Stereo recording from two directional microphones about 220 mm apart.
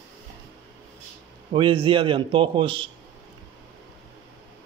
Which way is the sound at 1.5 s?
25° right (ahead or behind).